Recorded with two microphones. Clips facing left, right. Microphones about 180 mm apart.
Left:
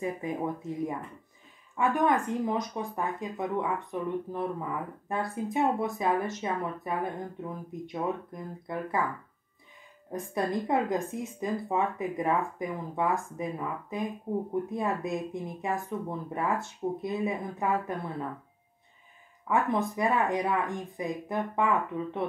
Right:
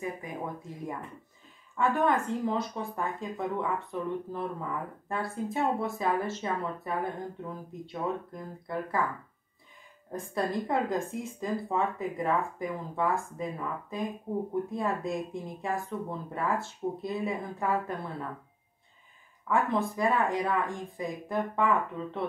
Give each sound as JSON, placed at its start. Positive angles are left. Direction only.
{"t": 1.8, "sound": "speech", "side_deg": 15}
{"t": 10.1, "sound": "speech", "side_deg": 20}
{"t": 19.5, "sound": "speech", "side_deg": 20}